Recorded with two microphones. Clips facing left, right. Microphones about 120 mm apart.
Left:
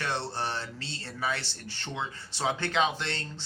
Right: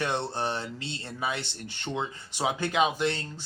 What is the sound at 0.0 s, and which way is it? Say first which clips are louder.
Speech: right 3 dB; 15° right (ahead or behind).